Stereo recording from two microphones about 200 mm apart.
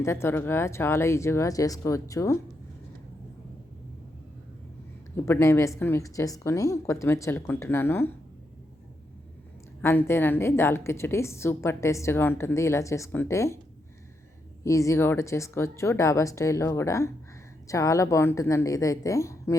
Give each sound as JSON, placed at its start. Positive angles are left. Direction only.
{"t": 0.0, "sound": "a woman's voice", "side_deg": 15}
{"t": 5.1, "sound": "a woman's voice", "side_deg": 15}
{"t": 9.8, "sound": "a woman's voice", "side_deg": 10}
{"t": 14.6, "sound": "a woman's voice", "side_deg": 15}